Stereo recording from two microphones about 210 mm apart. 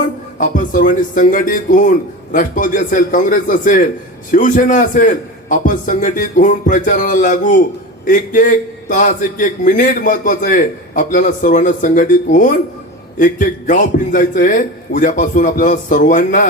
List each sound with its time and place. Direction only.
0.3 s a man's voice: 40° left (ahead or behind)